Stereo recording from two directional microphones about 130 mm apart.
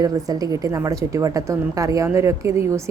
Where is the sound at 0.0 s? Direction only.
30° right (ahead or behind).